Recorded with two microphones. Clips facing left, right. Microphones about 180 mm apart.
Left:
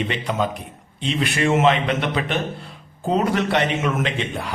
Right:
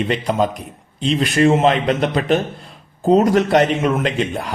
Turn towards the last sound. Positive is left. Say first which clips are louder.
# right 5 dB
turn(degrees=-45)  # may be behind; listen again after turning